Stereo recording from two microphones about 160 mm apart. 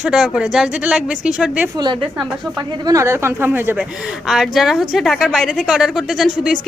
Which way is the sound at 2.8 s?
20° right (ahead or behind).